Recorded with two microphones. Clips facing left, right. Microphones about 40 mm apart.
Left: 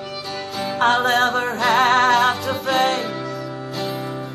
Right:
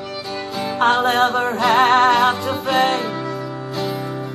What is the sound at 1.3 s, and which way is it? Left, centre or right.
Music, centre.